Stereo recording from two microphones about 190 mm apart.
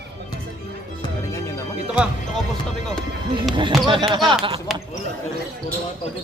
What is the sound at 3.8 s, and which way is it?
Speech, 25° right (ahead or behind).